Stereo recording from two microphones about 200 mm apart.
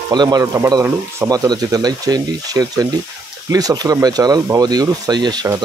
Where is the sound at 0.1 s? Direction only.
20° right (ahead or behind).